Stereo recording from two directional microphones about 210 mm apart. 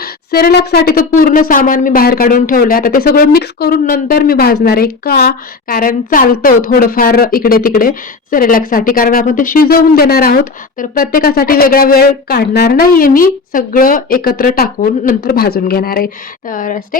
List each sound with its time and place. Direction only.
0.0 s speech: 45° left (ahead or behind)